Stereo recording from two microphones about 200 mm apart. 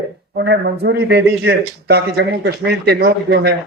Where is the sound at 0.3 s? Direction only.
60° right (ahead or behind).